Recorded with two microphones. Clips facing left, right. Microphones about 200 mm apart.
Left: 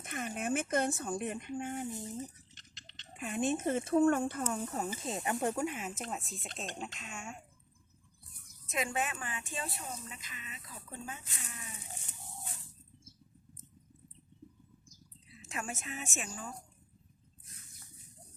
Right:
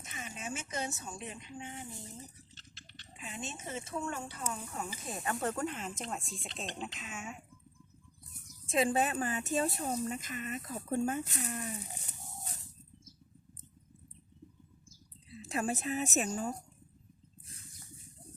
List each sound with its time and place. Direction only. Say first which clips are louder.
0.0 s speech: left 7 dB; 55° left (ahead or behind)
2.6 s a sound: right 3 dB; 20° left (ahead or behind)
3.1 s speech: left 11 dB; 55° left (ahead or behind)
4.5 s speech: left 5 dB; 35° left (ahead or behind)
5.0 s speech: left 1 dB; 20° left (ahead or behind); by 7.3 s centre (ahead or behind)
8.6 s speech: right 6 dB; 30° right (ahead or behind)
11.9 s livestock: right 1 dB; 40° right (ahead or behind)
15.4 s a woman's voice: right 7 dB; 35° right (ahead or behind)